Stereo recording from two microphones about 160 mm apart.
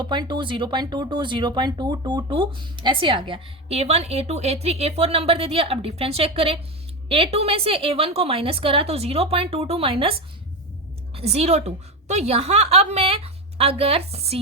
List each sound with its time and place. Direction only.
0.0 s a woman's voice: 30° right (ahead or behind)